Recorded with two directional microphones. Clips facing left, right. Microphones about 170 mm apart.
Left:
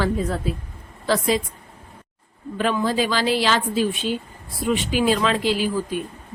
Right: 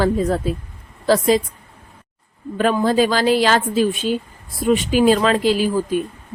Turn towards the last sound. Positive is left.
turn(degrees=-45)  # may be behind; listen again after turning